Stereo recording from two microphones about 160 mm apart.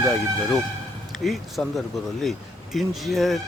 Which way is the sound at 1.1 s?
Centre (ahead or behind).